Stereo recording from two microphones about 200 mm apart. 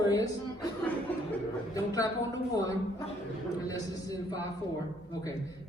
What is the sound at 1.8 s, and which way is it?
Speech, 15° left (ahead or behind).